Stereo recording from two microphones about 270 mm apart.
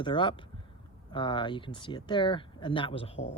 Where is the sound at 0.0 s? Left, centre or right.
Centre.